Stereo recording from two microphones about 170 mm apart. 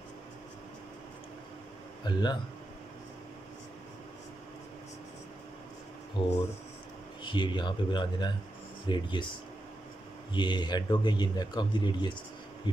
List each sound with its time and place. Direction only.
2.0 s speech: 25° left (ahead or behind)
6.2 s speech: 30° left (ahead or behind)
10.3 s speech: 25° left (ahead or behind)